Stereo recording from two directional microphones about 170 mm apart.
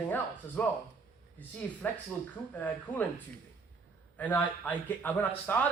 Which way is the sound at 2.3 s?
10° left (ahead or behind).